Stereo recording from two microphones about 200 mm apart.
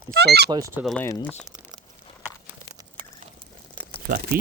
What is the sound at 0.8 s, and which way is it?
Speech, 10° left (ahead or behind).